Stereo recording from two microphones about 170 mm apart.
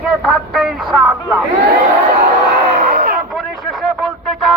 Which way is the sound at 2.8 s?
60° right (ahead or behind).